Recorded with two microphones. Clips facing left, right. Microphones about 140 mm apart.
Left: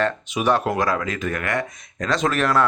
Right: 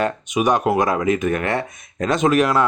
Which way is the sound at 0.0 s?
15° right (ahead or behind).